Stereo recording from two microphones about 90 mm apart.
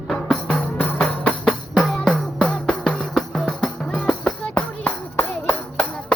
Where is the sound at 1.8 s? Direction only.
Centre (ahead or behind).